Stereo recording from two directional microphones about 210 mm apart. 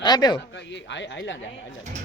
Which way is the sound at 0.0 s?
20° left (ahead or behind).